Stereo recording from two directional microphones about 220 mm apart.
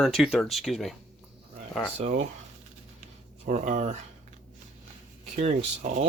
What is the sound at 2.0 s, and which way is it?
Speech, 35° right (ahead or behind).